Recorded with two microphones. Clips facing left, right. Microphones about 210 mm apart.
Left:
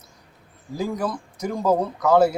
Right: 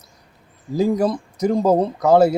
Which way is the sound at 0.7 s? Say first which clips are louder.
Right 8 dB; 25° right (ahead or behind).